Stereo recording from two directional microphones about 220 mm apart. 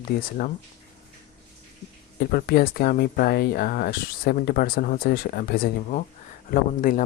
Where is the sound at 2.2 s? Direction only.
45° left (ahead or behind).